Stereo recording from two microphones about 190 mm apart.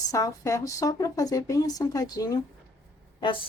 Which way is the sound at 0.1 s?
15° left (ahead or behind).